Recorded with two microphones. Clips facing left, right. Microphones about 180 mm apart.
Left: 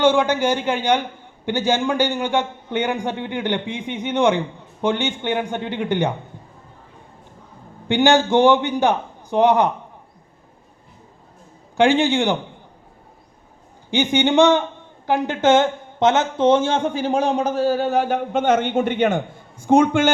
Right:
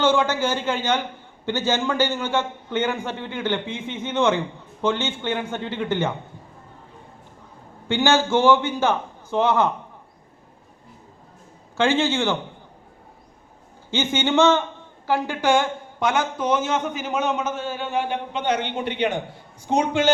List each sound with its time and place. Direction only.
0.0 s a man's voice: 15° left (ahead or behind)
7.9 s a man's voice: 15° left (ahead or behind)
11.8 s a man's voice: 15° left (ahead or behind)
13.9 s a man's voice: 15° left (ahead or behind); by 20.1 s 50° left (ahead or behind)